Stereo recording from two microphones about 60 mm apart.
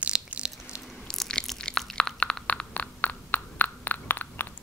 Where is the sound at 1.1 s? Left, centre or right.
Centre.